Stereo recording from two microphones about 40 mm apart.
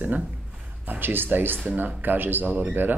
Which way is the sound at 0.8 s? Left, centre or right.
Right.